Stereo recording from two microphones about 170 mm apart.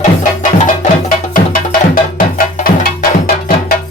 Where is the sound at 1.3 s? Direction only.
55° left (ahead or behind).